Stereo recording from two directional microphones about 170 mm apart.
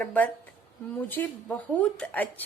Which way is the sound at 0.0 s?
10° left (ahead or behind).